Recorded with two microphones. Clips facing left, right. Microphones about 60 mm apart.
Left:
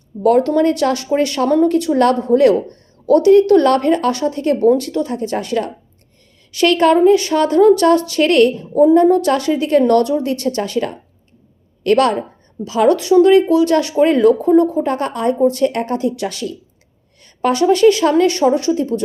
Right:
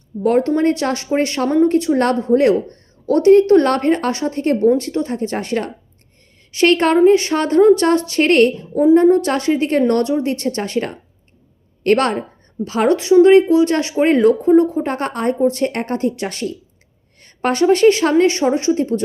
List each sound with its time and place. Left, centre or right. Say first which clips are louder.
0.3 s speech: left 2 dB; right